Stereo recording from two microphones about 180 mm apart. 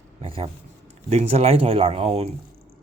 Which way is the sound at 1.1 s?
35° right (ahead or behind).